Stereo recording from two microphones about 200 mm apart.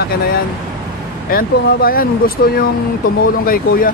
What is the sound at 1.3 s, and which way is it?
Speech, 45° left (ahead or behind).